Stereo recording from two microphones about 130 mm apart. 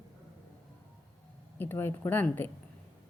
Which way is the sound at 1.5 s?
15° left (ahead or behind).